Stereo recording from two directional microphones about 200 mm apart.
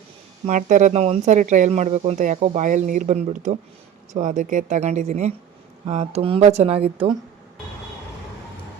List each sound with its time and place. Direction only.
0.4 s speech: 40° right (ahead or behind)